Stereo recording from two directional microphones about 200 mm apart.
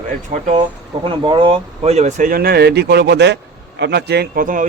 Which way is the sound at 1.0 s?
25° right (ahead or behind).